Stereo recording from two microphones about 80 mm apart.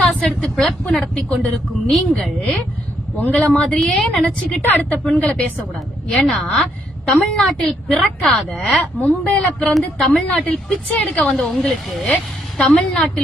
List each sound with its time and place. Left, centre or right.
0.1 s a sound: centre
0.5 s a woman's voice: centre
3.2 s speech: centre
4.6 s a woman's voice: left
6.1 s a woman's voice: centre
8.4 s speech: centre
9.7 s a woman's voice: centre
10.2 s a woman's voice: centre
11.4 s a woman's voice: centre